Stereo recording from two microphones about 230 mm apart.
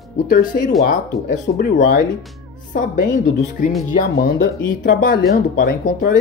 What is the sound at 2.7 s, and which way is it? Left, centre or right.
Speech, left.